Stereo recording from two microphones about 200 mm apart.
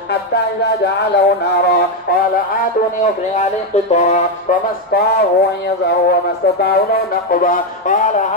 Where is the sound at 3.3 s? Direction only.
35° left (ahead or behind).